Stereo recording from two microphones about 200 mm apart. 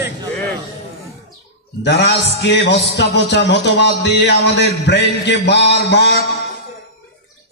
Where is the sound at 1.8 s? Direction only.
60° left (ahead or behind).